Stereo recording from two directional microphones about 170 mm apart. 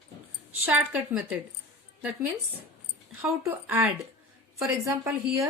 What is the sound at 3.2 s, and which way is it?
Speech, 15° right (ahead or behind).